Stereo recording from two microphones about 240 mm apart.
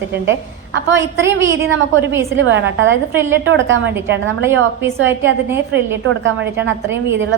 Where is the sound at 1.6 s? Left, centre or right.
Right.